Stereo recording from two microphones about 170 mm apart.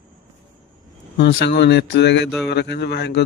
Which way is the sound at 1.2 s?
90° left.